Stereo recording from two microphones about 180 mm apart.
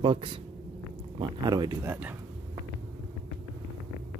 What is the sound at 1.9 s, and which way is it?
Speech, 10° right (ahead or behind).